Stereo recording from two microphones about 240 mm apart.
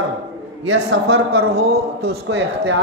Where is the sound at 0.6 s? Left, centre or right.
Right.